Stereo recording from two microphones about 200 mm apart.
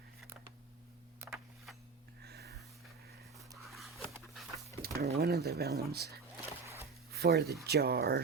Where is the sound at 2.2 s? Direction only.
55° right (ahead or behind).